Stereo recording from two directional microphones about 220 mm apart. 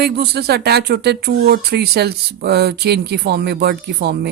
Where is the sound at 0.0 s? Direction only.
45° right (ahead or behind).